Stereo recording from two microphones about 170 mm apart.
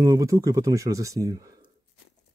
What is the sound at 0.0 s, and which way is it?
Speech, 20° right (ahead or behind).